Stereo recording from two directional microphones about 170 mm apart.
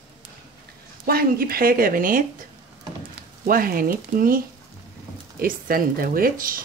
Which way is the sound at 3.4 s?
55° right (ahead or behind).